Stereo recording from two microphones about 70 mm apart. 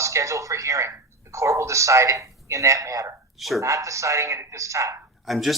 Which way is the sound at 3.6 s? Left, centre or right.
Right.